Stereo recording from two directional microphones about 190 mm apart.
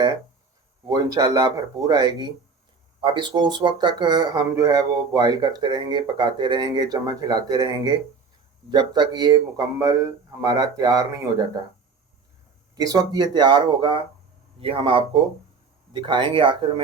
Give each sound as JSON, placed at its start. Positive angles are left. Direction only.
{"t": 0.9, "sound": "speech", "side_deg": -20}
{"t": 12.7, "sound": "speech", "side_deg": -20}